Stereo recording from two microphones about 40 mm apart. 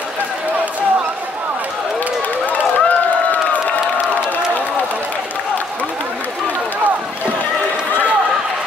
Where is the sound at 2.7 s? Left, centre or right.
Left.